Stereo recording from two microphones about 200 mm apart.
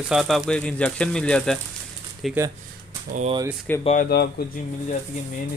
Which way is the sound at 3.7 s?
10° left (ahead or behind).